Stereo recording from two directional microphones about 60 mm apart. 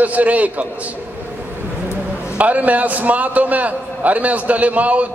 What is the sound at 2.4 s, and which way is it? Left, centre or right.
A man's voice, right.